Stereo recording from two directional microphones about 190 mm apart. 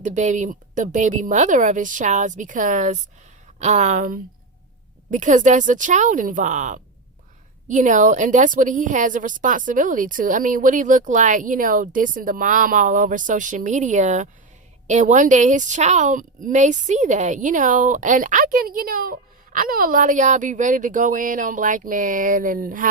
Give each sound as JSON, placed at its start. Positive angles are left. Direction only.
{"t": 0.0, "sound": "a woman's voice", "side_deg": -40}